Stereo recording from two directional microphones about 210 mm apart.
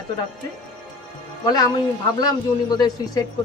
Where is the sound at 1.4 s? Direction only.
20° left (ahead or behind).